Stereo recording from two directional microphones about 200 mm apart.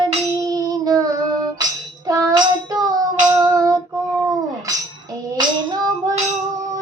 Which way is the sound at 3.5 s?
15° right (ahead or behind).